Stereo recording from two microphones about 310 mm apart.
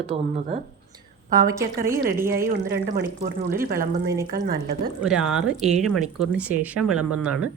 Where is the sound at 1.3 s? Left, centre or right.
Centre.